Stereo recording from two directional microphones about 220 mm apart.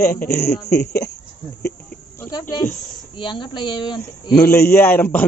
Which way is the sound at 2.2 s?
15° left (ahead or behind).